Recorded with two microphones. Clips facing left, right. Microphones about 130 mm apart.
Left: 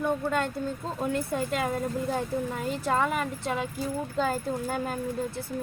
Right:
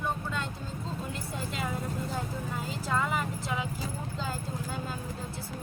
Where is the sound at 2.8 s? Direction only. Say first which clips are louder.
Left 4 dB; 60° left (ahead or behind).